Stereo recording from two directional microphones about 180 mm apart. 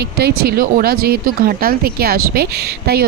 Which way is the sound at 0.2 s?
60° right (ahead or behind).